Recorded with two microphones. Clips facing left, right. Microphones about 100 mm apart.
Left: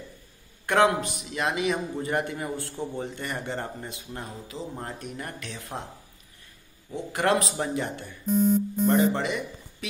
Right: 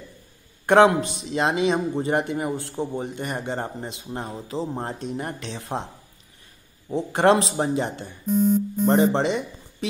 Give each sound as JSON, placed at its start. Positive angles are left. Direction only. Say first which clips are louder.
{"t": 0.7, "sound": "a man's voice", "louder": "right 6 dB", "side_deg": -25}
{"t": 4.3, "sound": "a man's voice", "louder": "right 7 dB", "side_deg": -35}
{"t": 6.9, "sound": "a man's voice", "louder": "right 6 dB", "side_deg": -30}